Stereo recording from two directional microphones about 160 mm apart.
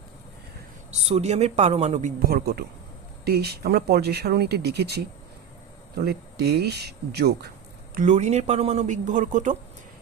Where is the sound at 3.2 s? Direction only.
80° right.